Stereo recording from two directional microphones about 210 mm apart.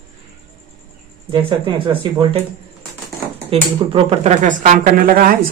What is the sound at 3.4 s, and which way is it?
Speech, 25° right (ahead or behind).